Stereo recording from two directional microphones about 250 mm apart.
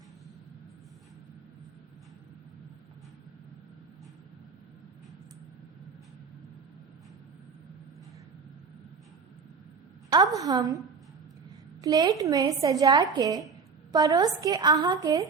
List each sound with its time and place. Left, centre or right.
10.3 s a woman's voice: centre
11.8 s a woman's voice: centre